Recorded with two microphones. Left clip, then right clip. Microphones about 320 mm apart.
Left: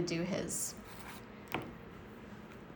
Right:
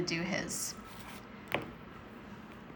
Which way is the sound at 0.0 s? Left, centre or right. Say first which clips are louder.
Right 2 dB; centre.